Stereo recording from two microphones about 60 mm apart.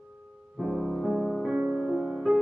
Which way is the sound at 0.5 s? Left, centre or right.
Centre.